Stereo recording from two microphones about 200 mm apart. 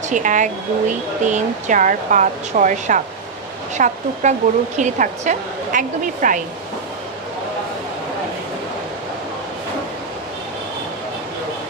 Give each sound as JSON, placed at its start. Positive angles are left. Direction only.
{"t": 0.1, "sound": "speech", "side_deg": -40}